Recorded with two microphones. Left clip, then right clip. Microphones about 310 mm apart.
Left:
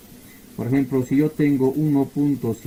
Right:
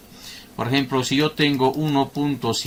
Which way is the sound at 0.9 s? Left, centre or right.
Centre.